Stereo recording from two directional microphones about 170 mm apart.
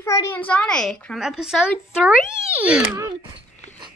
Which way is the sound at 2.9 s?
25° right (ahead or behind).